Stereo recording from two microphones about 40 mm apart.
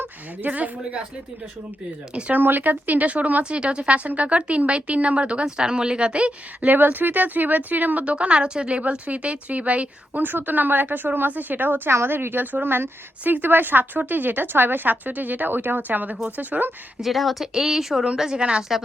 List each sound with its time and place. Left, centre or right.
0.5 s speech: right
2.3 s speech: right
3.5 s speech: right
6.7 s speech: right
8.0 s speech: right
9.0 s speech: right
10.2 s speech: right
11.9 s a woman's voice: right
12.6 s speech: right
13.2 s speech: right
17.0 s a woman's voice: centre
17.4 s speech: centre
18.2 s speech: right